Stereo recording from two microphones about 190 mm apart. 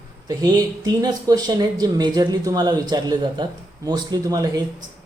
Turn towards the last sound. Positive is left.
turn(degrees=-20)  # may be behind; listen again after turning